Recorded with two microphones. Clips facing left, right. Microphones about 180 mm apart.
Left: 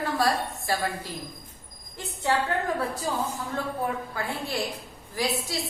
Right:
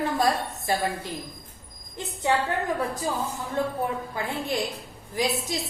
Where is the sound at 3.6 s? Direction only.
20° right (ahead or behind).